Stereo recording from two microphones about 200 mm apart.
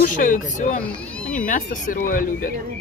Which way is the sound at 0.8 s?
5° left (ahead or behind).